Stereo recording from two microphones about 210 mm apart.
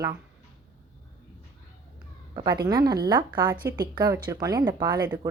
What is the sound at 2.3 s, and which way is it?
A woman's voice, 20° right (ahead or behind).